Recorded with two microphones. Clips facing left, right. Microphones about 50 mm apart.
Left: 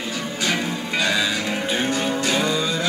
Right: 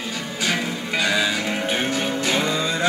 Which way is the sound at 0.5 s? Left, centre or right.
Centre.